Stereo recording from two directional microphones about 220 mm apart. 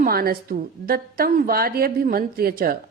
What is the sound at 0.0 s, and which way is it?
A woman's voice, 40° right (ahead or behind).